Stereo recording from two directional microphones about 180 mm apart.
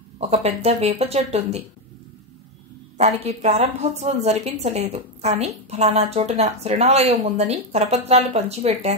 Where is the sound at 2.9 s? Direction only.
40° right (ahead or behind).